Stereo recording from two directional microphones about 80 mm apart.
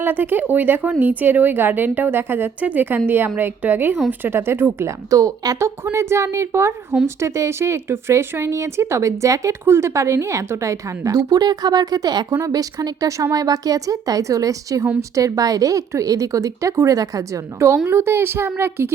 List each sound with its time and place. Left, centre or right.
0.0 s speech: right
5.1 s a woman's voice: right
5.5 s a woman's voice: right